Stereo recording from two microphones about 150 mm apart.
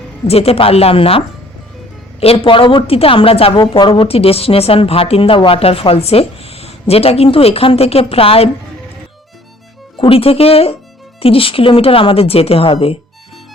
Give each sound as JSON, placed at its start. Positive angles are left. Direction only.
{"t": 0.3, "sound": "a woman's voice", "side_deg": 40}
{"t": 2.2, "sound": "a woman's voice", "side_deg": 40}
{"t": 10.0, "sound": "a woman's voice", "side_deg": 40}